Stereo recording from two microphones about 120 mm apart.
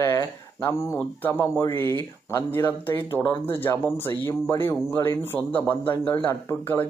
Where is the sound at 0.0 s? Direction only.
25° left (ahead or behind).